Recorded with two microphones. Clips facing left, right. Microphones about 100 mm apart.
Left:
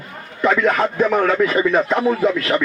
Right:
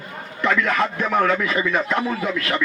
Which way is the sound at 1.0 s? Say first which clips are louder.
Left 4 dB; 20° left (ahead or behind).